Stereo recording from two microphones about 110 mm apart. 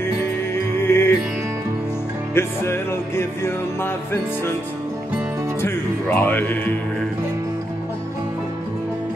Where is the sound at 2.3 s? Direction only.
20° left (ahead or behind).